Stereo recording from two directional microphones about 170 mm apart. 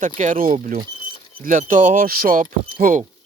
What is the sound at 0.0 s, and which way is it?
Speech, 45° right (ahead or behind).